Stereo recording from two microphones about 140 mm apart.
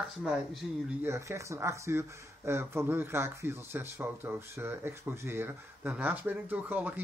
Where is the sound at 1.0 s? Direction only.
20° right (ahead or behind).